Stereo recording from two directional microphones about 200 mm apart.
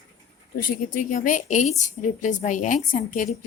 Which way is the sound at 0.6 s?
45° left (ahead or behind).